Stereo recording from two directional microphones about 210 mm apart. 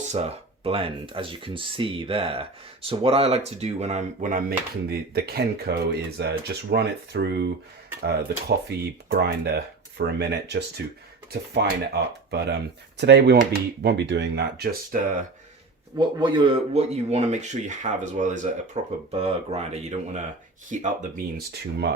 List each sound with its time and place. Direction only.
0.1 s speech: 30° right (ahead or behind); by 15.2 s 45° right (ahead or behind)
16.0 s speech: 20° right (ahead or behind)
21.3 s speech: 50° right (ahead or behind)